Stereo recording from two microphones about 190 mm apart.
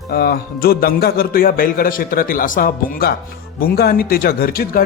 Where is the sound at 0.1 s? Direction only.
55° left (ahead or behind).